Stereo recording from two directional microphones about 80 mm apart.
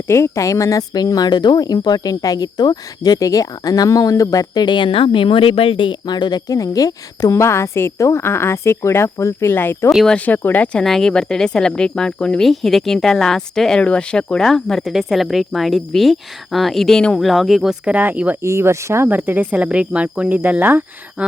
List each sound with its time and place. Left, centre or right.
0.1 s speech: left
4.6 s speech: left
6.5 s a woman's voice: left; by 17.7 s centre
17.8 s speech: right
18.4 s speech: right
19.0 s speech: right